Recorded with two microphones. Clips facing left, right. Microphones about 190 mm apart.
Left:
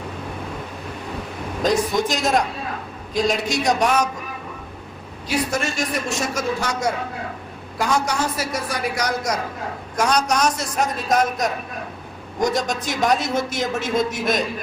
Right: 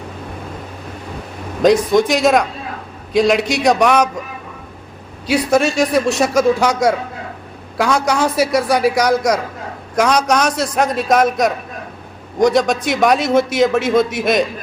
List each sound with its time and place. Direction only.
1.6 s a man's voice: 70° right (ahead or behind)
5.3 s a man's voice: 80° right
12.4 s a man's voice: 75° right (ahead or behind)